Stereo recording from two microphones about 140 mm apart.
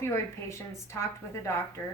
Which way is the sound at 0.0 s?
20° left (ahead or behind).